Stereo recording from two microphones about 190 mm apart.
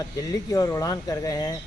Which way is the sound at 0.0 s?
20° left (ahead or behind).